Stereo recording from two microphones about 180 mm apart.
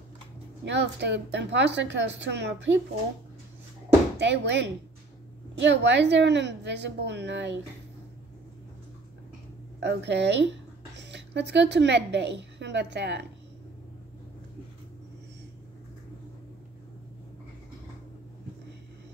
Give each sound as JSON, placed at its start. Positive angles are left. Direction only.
{"t": 0.7, "sound": "a woman's voice", "side_deg": -75}
{"t": 4.2, "sound": "a woman's voice", "side_deg": -75}
{"t": 9.8, "sound": "a woman's voice", "side_deg": -70}